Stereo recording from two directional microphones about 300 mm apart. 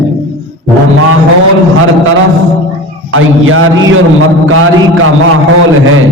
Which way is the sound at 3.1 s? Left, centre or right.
Right.